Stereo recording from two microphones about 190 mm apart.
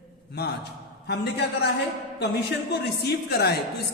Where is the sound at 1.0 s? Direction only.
60° left (ahead or behind).